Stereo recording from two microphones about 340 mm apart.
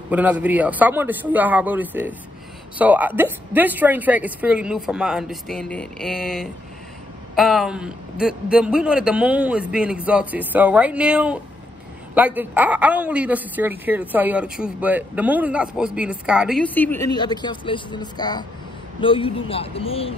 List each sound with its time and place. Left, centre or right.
0.1 s a woman's voice: centre